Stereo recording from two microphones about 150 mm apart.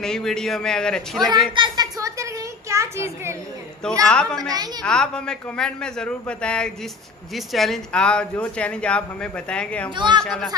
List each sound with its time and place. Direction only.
0.0 s a man's voice: 5° left (ahead or behind)
1.5 s a sound: 30° right (ahead or behind)
2.7 s a child's voice: 20° right (ahead or behind)
4.0 s a man's voice: 5° left (ahead or behind)
9.9 s speech: 30° right (ahead or behind)
10.2 s a man's voice: centre (ahead or behind)